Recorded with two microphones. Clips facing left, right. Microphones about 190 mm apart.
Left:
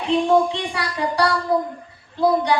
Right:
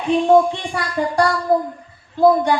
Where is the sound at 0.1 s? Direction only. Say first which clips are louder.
Right 3 dB; 50° right (ahead or behind).